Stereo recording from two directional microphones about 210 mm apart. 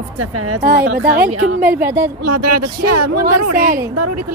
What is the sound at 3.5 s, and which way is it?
Speech, 45° right (ahead or behind).